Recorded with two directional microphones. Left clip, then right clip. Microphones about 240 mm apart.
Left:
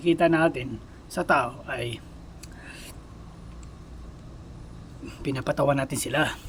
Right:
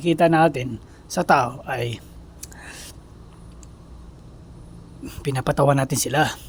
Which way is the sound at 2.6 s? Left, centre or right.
Right.